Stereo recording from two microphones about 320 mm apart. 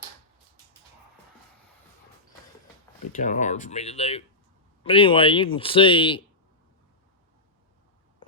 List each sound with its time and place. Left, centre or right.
3.2 s speech: left